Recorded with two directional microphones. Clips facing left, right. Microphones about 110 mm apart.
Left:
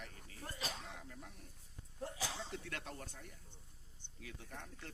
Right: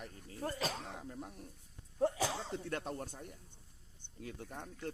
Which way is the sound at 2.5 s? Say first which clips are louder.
Right 7 dB; 40° right (ahead or behind).